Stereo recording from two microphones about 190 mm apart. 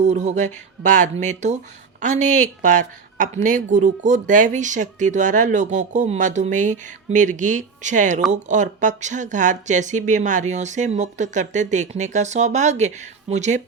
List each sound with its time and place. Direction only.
0.0 s a woman's voice: 40° right (ahead or behind)